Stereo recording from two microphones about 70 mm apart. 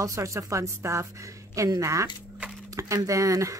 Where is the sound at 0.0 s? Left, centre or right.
Right.